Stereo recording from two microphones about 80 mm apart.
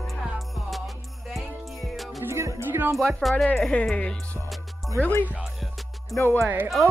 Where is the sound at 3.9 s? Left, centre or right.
Centre.